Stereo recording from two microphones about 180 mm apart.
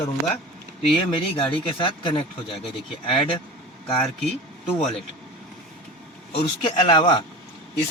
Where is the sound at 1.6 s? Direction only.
30° left (ahead or behind).